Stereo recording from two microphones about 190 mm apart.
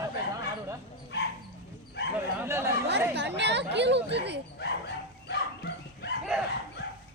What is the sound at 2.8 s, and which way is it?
Speech, 65° right (ahead or behind).